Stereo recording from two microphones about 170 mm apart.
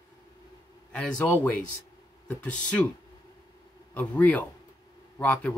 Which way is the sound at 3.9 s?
10° left (ahead or behind).